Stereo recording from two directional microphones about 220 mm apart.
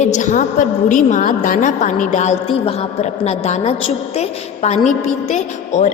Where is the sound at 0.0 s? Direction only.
35° left (ahead or behind).